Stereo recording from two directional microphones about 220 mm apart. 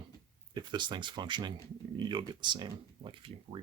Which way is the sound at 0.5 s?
20° right (ahead or behind).